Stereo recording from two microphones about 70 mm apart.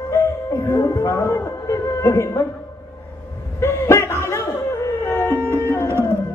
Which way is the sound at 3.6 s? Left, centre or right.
Left.